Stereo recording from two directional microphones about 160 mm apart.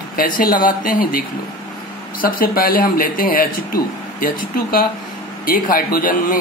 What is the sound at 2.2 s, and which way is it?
A man's voice, 65° left (ahead or behind).